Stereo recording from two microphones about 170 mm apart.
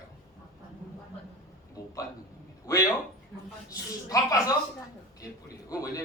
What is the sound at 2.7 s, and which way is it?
Speech, 20° left (ahead or behind).